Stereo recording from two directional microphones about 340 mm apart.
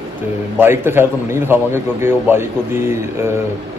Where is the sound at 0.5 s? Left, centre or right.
Centre.